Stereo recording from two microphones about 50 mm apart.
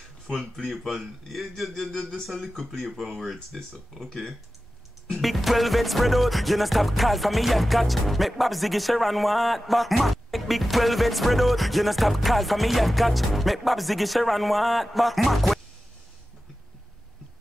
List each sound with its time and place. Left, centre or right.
0.3 s music: centre
1.3 s a sound: centre
2.2 s music: centre